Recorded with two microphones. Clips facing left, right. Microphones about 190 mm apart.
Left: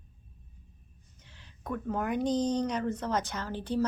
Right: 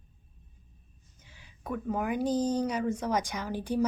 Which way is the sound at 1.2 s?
10° right (ahead or behind).